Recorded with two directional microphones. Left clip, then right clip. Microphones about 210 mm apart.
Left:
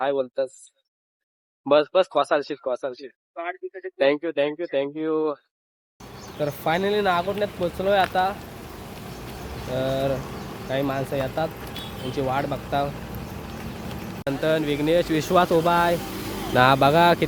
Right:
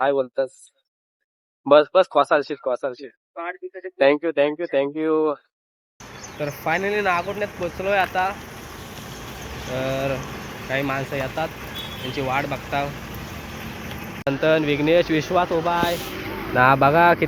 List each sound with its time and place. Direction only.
0.0 s speech: centre (ahead or behind)
1.6 s speech: centre (ahead or behind)
3.3 s speech: 25° left (ahead or behind)
3.9 s speech: centre (ahead or behind)
6.4 s speech: 15° left (ahead or behind)
9.7 s speech: 15° left (ahead or behind)
14.3 s speech: centre (ahead or behind)
15.3 s speech: 30° left (ahead or behind)
16.6 s speech: 15° left (ahead or behind)